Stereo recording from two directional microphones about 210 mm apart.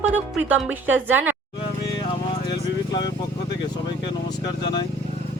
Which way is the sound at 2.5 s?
20° left (ahead or behind).